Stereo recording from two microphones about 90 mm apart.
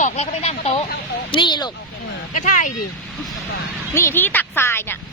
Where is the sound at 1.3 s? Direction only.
60° left (ahead or behind).